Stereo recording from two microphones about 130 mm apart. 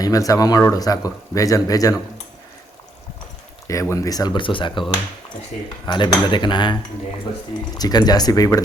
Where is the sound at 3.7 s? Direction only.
25° left (ahead or behind); by 4.9 s 40° left (ahead or behind).